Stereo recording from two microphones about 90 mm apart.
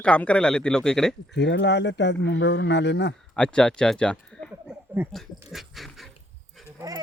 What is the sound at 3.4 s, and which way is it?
Speech, 10° left (ahead or behind).